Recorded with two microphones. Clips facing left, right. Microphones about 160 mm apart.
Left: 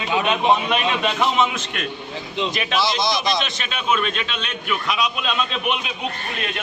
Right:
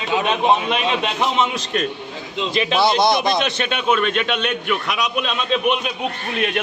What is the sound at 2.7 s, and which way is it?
A man's voice, 60° right (ahead or behind).